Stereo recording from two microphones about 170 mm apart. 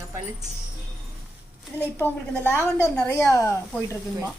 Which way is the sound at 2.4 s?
15° right (ahead or behind).